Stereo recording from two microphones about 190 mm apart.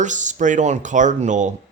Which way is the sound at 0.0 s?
40° right (ahead or behind).